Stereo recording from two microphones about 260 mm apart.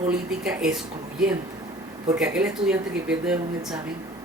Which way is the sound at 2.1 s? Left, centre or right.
Centre.